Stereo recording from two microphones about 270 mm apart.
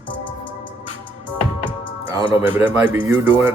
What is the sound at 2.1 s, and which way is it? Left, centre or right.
Speech, centre.